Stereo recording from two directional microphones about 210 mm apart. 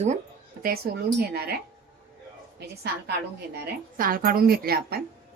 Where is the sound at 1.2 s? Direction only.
50° right (ahead or behind).